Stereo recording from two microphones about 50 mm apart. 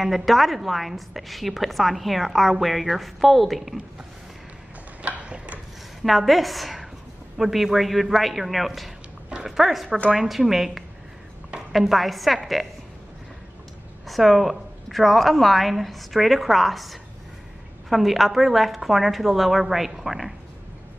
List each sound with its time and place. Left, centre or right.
0.0 s a woman's voice: centre
5.0 s a sound: right
6.0 s a woman's voice: centre
14.0 s a woman's voice: centre